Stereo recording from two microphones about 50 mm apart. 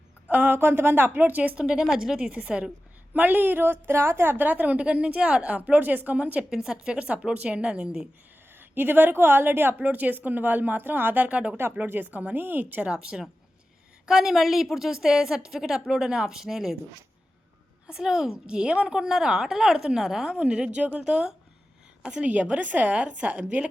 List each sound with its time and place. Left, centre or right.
0.3 s a woman's voice: right
1.5 s a woman's voice: centre
2.4 s speech: centre
3.1 s a woman's voice: right
6.5 s a woman's voice: centre
8.5 s a woman's voice: right
11.9 s a woman's voice: right
12.8 s a woman's voice: centre
17.8 s a woman's voice: centre
20.4 s speech: right
21.0 s a woman's voice: centre
22.2 s a woman's voice: right